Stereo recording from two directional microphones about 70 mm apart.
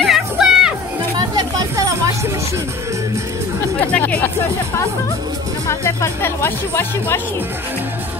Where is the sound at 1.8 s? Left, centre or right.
Right.